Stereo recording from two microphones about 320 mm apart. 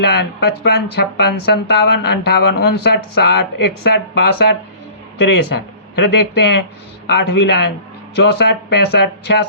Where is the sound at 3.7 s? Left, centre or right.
Left.